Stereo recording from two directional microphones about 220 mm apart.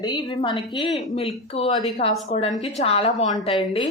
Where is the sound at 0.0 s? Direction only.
20° left (ahead or behind).